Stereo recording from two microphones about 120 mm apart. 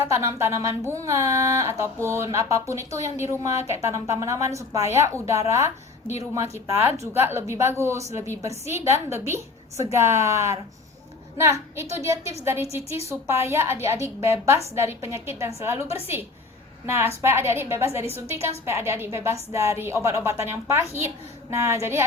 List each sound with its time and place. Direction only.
0.0 s speech: 25° right (ahead or behind)